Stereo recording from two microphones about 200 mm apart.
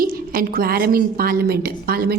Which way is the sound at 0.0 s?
50° right (ahead or behind).